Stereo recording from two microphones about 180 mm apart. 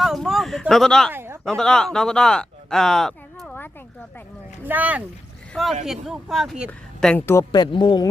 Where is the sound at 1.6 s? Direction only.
5° left (ahead or behind).